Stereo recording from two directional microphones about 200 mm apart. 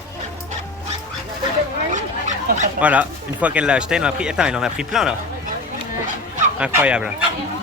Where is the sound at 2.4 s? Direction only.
40° right (ahead or behind).